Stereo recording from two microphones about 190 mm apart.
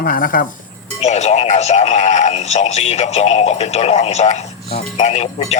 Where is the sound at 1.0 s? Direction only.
35° left (ahead or behind).